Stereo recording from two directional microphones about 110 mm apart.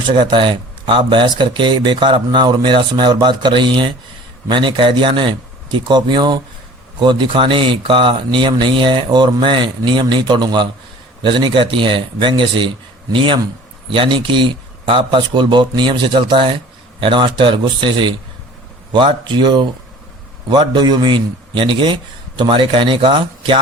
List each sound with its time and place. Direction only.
0.2 s speech: 50° right (ahead or behind)